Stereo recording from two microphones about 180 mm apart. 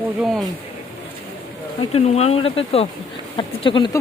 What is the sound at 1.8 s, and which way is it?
Speech, 35° left (ahead or behind).